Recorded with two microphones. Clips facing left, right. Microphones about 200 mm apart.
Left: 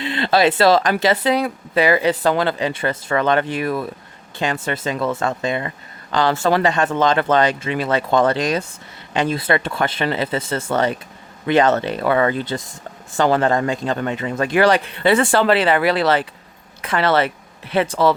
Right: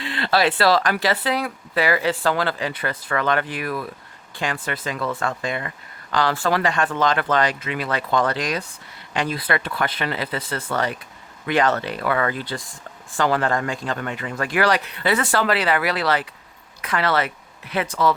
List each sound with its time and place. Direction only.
0.0 s speech: 20° left (ahead or behind)